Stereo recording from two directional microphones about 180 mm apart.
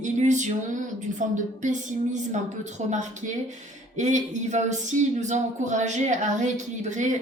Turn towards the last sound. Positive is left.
turn(degrees=-40)  # may be behind; listen again after turning